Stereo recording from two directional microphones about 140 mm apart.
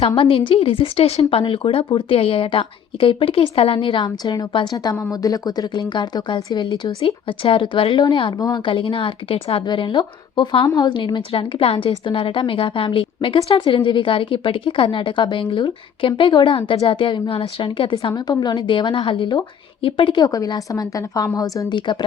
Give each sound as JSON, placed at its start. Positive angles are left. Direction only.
{"t": 0.2, "sound": "a woman's voice", "side_deg": 40}